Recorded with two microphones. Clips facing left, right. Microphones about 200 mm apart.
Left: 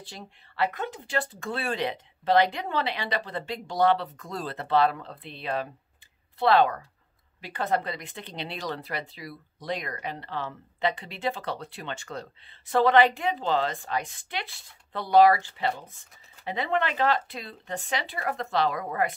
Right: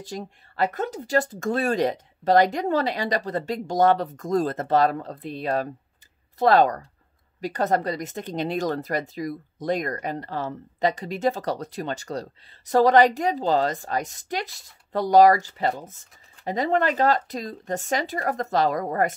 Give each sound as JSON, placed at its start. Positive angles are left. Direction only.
{"t": 0.0, "sound": "speech", "side_deg": -40}